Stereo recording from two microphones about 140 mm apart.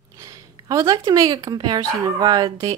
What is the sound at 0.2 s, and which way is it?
A woman's voice, 25° right (ahead or behind).